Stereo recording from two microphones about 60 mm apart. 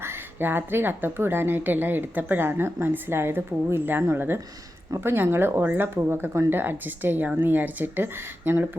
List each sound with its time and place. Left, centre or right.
0.0 s a woman's voice: right